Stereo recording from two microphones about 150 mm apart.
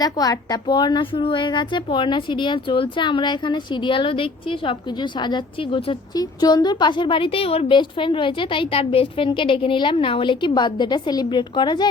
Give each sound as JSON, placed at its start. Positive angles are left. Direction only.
{"t": 0.0, "sound": "speech", "side_deg": 25}